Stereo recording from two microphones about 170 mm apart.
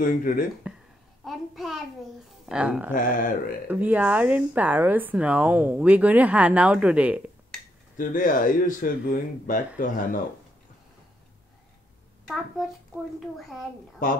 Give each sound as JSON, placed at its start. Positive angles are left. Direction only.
{"t": 0.0, "sound": "speech", "side_deg": 55}
{"t": 1.2, "sound": "a sound", "side_deg": 0}
{"t": 2.4, "sound": "speech", "side_deg": -5}
{"t": 2.9, "sound": "speech", "side_deg": 50}
{"t": 3.6, "sound": "speech", "side_deg": -10}
{"t": 8.0, "sound": "speech", "side_deg": 50}
{"t": 13.4, "sound": "a child's voice", "side_deg": 0}
{"t": 14.0, "sound": "speech", "side_deg": 55}